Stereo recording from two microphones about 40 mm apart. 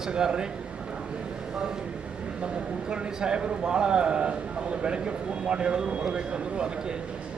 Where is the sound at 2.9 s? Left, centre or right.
Right.